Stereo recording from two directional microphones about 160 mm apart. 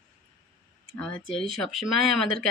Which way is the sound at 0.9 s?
5° left (ahead or behind).